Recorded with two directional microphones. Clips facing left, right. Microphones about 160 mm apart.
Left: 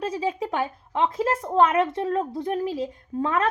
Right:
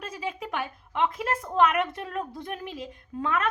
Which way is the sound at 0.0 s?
35° left (ahead or behind).